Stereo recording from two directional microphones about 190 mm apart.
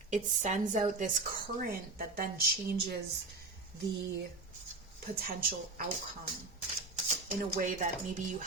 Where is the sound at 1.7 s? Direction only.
50° right (ahead or behind).